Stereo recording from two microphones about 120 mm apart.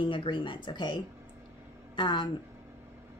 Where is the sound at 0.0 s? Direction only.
45° left (ahead or behind).